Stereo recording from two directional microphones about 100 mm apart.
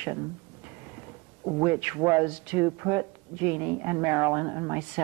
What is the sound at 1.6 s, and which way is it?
Speech, 20° right (ahead or behind).